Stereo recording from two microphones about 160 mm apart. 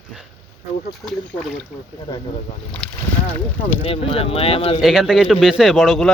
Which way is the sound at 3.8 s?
35° left (ahead or behind).